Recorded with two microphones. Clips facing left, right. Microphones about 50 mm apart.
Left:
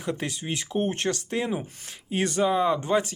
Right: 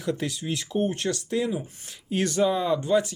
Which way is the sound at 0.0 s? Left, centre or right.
Left.